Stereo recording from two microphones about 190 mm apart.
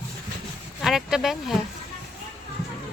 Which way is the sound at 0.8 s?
Centre (ahead or behind).